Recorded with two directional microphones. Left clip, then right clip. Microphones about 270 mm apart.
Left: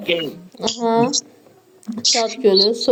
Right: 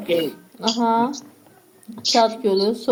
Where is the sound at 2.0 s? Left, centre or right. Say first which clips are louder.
Right 1 dB; centre.